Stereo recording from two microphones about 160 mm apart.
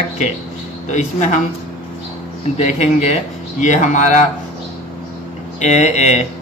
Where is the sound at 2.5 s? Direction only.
40° left (ahead or behind).